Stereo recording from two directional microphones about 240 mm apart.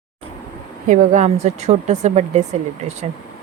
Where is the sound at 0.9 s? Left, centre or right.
Right.